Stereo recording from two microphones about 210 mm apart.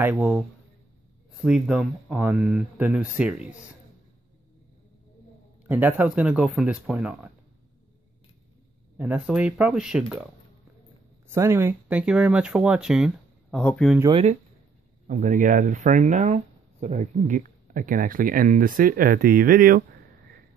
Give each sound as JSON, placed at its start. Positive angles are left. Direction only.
{"t": 0.0, "sound": "a man's voice", "side_deg": -5}
{"t": 1.4, "sound": "speech", "side_deg": -5}
{"t": 5.7, "sound": "speech", "side_deg": -10}
{"t": 8.9, "sound": "speech", "side_deg": -5}
{"t": 11.2, "sound": "speech", "side_deg": -10}
{"t": 14.1, "sound": "speech", "side_deg": -30}